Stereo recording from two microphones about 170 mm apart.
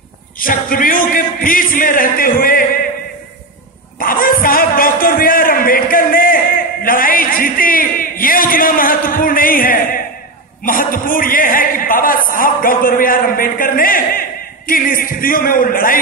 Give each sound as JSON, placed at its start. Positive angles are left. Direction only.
{"t": 0.4, "sound": "a man's voice", "side_deg": 55}
{"t": 4.0, "sound": "a sound", "side_deg": 55}
{"t": 14.7, "sound": "speech", "side_deg": 55}